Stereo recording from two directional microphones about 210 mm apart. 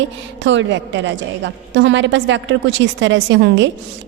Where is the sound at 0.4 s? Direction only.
60° right (ahead or behind).